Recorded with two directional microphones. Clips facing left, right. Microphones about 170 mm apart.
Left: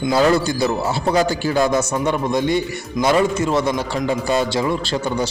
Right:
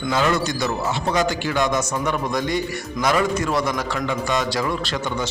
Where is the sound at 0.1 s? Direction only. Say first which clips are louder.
Left 5 dB; 35° left (ahead or behind).